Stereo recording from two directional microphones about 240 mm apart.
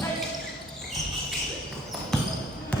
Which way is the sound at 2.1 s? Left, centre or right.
Centre.